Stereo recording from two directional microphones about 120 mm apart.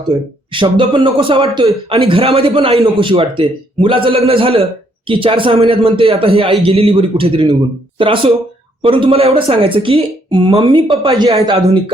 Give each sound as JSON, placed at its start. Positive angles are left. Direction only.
{"t": 0.5, "sound": "a man's voice", "side_deg": -45}